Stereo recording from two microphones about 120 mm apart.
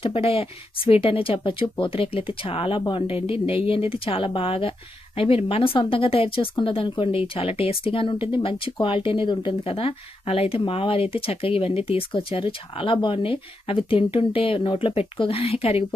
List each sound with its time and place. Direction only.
0.0 s speech: 50° left (ahead or behind)